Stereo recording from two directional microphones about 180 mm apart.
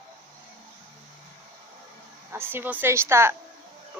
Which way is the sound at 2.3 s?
10° right (ahead or behind).